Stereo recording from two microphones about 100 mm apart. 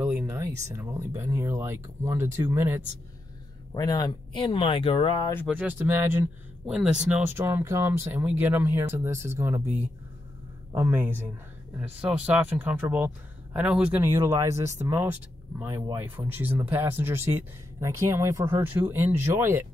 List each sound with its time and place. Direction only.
0.0 s speech: 20° right (ahead or behind)
3.7 s speech: 40° left (ahead or behind); by 5.2 s 60° left (ahead or behind)
5.6 s speech: 20° right (ahead or behind)
6.7 s speech: 5° right (ahead or behind)
7.3 s speech: 25° right (ahead or behind)
10.7 s speech: 20° right (ahead or behind)
14.0 s speech: 30° right (ahead or behind)